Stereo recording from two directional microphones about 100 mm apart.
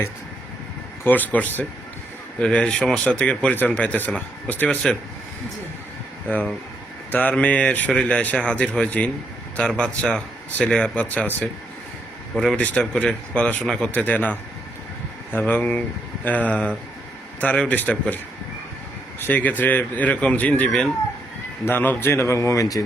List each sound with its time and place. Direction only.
1.0 s speech: 15° left (ahead or behind)
6.2 s speech: 15° left (ahead or behind)
12.8 s speech: 10° left (ahead or behind)
19.2 s speech: 15° left (ahead or behind)
21.6 s speech: 20° left (ahead or behind)